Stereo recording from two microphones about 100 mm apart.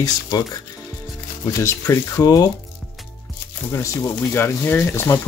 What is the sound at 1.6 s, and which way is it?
Speech, 30° left (ahead or behind).